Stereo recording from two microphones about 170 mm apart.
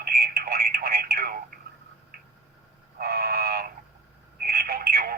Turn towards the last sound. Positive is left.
turn(degrees=-65)  # may be behind; listen again after turning